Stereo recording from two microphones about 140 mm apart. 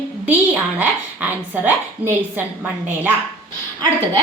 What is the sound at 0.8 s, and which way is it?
A woman's voice, 10° right (ahead or behind).